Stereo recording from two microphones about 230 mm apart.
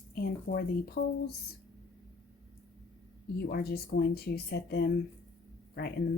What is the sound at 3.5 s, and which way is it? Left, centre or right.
Speech, left.